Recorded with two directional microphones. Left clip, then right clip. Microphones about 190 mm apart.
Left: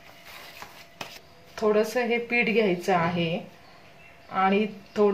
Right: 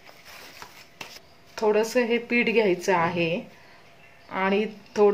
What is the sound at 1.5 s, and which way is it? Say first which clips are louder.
A woman's voice: right 1 dB; 30° right (ahead or behind).